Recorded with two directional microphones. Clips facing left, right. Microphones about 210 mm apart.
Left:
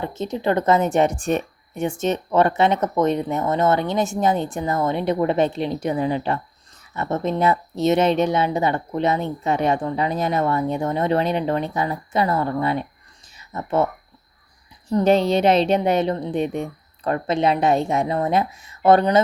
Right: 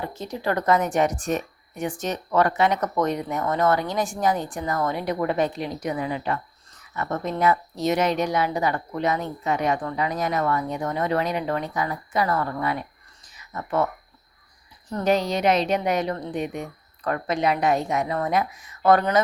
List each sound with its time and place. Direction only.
0.0 s speech: 25° left (ahead or behind)
15.0 s speech: 25° left (ahead or behind)